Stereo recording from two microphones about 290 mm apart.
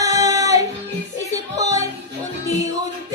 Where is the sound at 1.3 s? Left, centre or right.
Centre.